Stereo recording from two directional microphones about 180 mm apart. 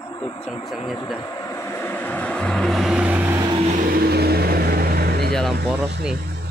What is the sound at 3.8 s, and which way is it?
Vehicle, 55° right (ahead or behind).